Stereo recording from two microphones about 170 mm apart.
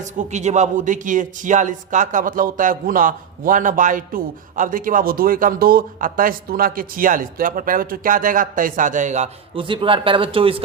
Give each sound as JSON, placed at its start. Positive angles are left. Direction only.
{"t": 0.0, "sound": "speech", "side_deg": -45}